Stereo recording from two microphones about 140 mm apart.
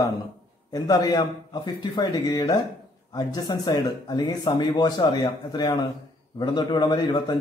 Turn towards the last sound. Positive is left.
turn(degrees=30)  # may be behind; listen again after turning